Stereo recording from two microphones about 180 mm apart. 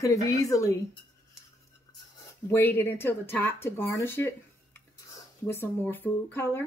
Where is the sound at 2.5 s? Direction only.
15° left (ahead or behind).